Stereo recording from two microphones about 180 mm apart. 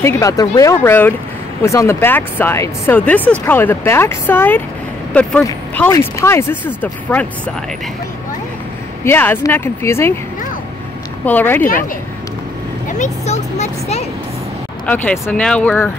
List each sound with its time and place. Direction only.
0.0 s speech: 15° left (ahead or behind)
9.0 s speech: 10° left (ahead or behind)
11.2 s speech: 10° left (ahead or behind)
13.0 s speech: 40° left (ahead or behind)
14.9 s speech: 10° left (ahead or behind)